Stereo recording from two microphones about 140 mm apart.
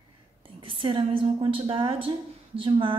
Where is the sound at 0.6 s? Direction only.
35° right (ahead or behind).